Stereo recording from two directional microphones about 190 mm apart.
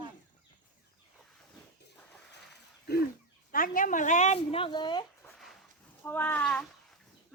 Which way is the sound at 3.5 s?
45° left (ahead or behind).